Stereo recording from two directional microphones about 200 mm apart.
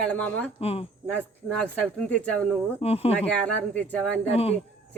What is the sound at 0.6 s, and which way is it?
Speech, 30° left (ahead or behind).